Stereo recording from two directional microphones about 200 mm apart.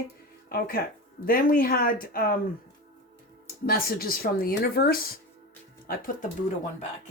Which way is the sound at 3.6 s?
45° left (ahead or behind).